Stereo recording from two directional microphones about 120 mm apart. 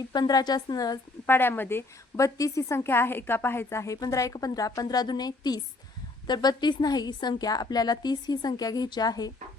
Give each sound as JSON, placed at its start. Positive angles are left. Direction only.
{"t": 0.1, "sound": "a woman's voice", "side_deg": 35}
{"t": 1.3, "sound": "a woman's voice", "side_deg": 15}